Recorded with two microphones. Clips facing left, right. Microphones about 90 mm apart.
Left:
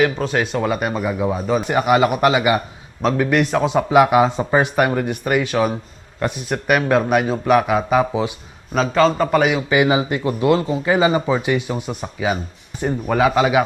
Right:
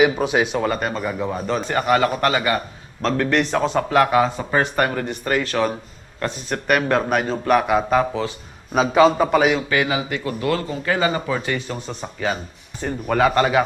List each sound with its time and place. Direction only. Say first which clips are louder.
0.0 s a man's voice: right 1 dB; 10° right (ahead or behind)
8.7 s a man's voice: right 1 dB; 10° right (ahead or behind)
9.6 s a man's voice: left 5 dB; 20° left (ahead or behind)